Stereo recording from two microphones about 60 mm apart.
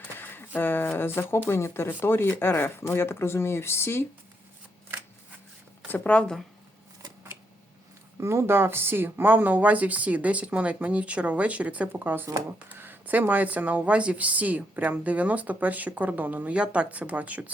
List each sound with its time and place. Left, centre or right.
0.2 s speech: left
5.9 s speech: left
8.2 s speech: right
11.9 s speech: right